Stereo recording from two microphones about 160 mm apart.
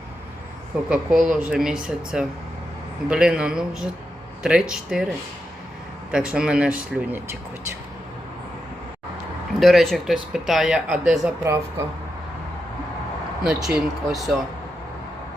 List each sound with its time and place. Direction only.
0.9 s speech: 5° right (ahead or behind)
6.1 s speech: 5° right (ahead or behind)
9.6 s speech: centre (ahead or behind)
11.4 s speech: 15° right (ahead or behind)
13.4 s speech: centre (ahead or behind)